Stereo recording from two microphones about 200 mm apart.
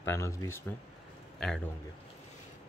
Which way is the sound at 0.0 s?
15° left (ahead or behind).